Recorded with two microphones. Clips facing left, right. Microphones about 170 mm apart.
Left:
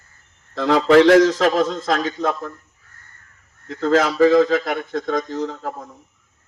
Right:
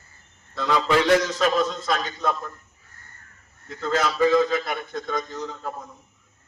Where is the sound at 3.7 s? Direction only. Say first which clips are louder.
Left 7 dB; 90° left.